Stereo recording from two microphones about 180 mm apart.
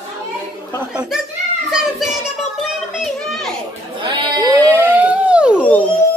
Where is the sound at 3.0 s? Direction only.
Centre (ahead or behind).